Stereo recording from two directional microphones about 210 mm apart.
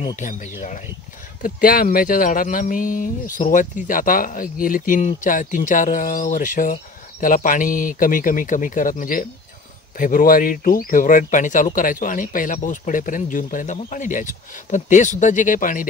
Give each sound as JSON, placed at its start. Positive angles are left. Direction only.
{"t": 0.1, "sound": "speech", "side_deg": 35}